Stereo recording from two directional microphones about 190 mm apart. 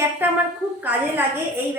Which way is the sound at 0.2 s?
10° right (ahead or behind).